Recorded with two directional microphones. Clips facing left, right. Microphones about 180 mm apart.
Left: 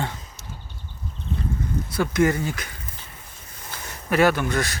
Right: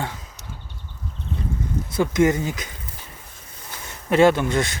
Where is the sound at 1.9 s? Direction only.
20° right (ahead or behind).